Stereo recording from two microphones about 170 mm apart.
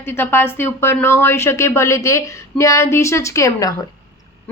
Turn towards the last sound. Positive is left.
turn(degrees=20)  # may be behind; listen again after turning